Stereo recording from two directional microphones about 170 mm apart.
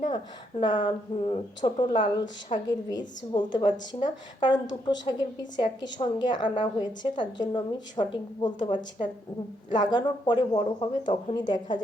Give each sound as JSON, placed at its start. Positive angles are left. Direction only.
{"t": 0.6, "sound": "a woman's voice", "side_deg": 30}